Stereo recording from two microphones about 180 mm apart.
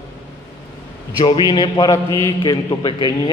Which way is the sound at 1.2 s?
25° left (ahead or behind).